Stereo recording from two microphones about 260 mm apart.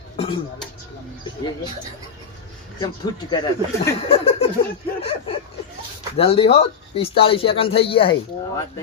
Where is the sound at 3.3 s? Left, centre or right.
Centre.